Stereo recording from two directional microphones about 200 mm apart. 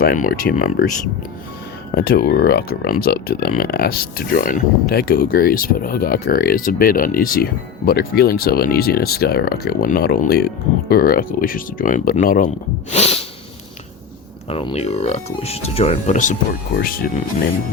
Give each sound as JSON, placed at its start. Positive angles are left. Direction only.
{"t": 0.0, "sound": "speech", "side_deg": 45}
{"t": 1.9, "sound": "speech", "side_deg": 50}
{"t": 12.9, "sound": "speech", "side_deg": 30}
{"t": 14.5, "sound": "speech", "side_deg": 30}
{"t": 16.7, "sound": "speech", "side_deg": 50}